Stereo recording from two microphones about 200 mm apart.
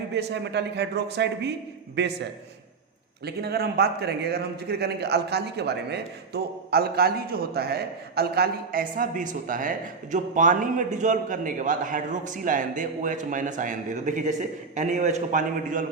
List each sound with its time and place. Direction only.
0.1 s speech: 60° right (ahead or behind)
3.2 s speech: 55° right (ahead or behind)